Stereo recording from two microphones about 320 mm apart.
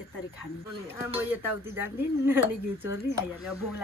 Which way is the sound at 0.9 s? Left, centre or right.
Centre.